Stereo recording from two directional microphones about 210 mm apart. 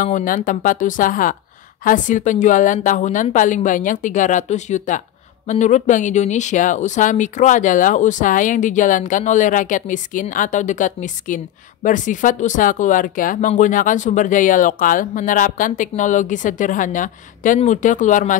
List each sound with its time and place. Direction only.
0.0 s a woman's voice: 40° left (ahead or behind)